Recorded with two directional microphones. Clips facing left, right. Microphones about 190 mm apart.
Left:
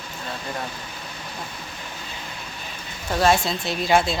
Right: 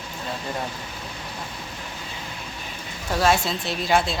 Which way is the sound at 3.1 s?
5° right (ahead or behind).